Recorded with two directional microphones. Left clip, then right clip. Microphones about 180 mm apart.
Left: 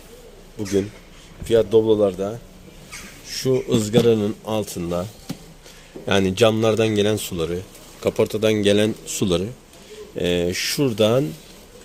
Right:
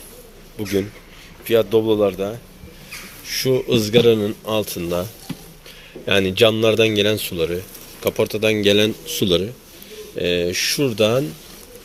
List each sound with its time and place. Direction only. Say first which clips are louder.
1.5 s speech: even; 15° left (ahead or behind)
6.1 s speech: right 2 dB; 20° left (ahead or behind)